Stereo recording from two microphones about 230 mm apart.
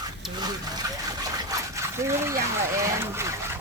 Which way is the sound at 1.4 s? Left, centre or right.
Centre.